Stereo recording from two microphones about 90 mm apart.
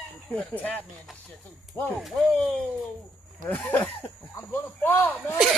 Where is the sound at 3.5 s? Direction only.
20° left (ahead or behind).